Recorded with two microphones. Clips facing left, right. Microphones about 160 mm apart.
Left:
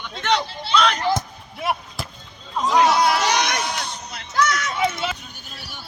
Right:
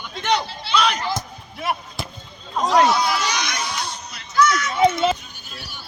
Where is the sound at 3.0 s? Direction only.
60° left (ahead or behind).